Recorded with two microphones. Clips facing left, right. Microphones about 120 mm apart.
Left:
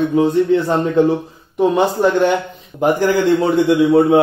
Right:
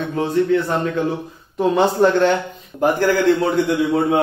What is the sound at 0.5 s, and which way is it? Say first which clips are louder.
Speech: left 3 dB; 20° left (ahead or behind).